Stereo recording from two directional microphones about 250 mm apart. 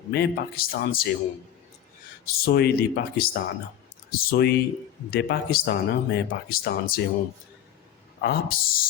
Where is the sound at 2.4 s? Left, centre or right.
Left.